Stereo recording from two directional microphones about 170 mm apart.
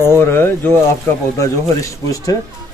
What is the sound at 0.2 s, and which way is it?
A man's voice, 15° left (ahead or behind).